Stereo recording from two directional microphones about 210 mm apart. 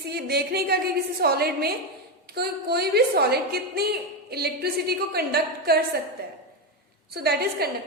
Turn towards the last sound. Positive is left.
turn(degrees=-45)  # may be behind; listen again after turning